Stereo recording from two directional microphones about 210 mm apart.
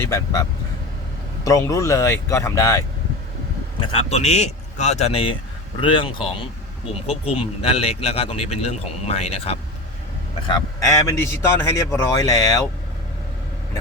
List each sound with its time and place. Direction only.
0.0 s a man's voice: 15° left (ahead or behind)
1.5 s a man's voice: 15° left (ahead or behind)
3.8 s a man's voice: 30° left (ahead or behind)
10.4 s a man's voice: 20° left (ahead or behind)